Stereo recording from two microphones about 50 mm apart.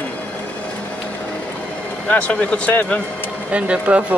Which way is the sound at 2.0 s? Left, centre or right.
Left.